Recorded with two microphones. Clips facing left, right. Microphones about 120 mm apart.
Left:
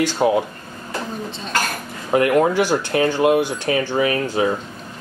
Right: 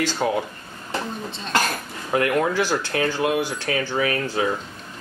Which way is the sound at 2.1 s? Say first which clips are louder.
Left 5 dB; 25° left (ahead or behind).